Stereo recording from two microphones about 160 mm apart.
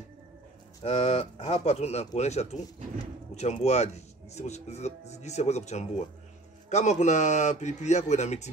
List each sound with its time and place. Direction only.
0.8 s speech: 40° left (ahead or behind)